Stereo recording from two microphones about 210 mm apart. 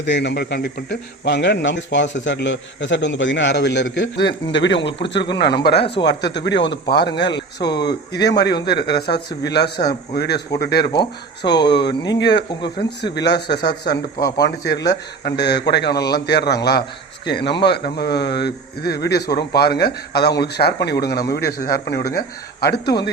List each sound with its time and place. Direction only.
0.0 s a man's voice: 55° left (ahead or behind)